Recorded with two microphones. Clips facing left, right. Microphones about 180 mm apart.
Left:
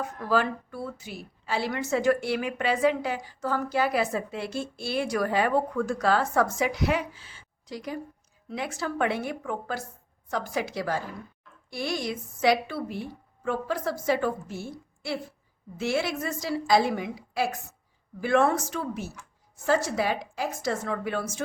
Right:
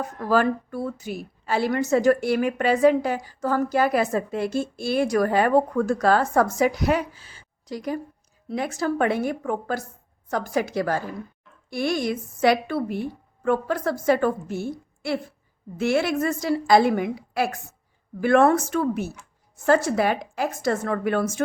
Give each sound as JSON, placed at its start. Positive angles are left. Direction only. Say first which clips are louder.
{"t": 0.0, "sound": "a woman's voice", "louder": "right 4 dB", "side_deg": -45}